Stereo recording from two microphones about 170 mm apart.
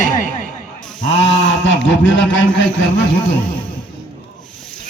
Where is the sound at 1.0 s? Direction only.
90° left.